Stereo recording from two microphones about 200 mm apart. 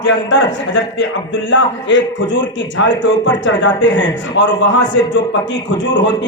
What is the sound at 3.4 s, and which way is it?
A man's voice, 65° left (ahead or behind).